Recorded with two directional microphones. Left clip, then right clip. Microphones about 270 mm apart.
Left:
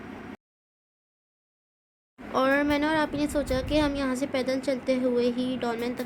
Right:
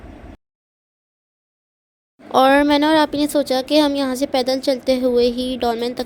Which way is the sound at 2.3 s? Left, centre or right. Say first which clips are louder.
Right 11 dB; right.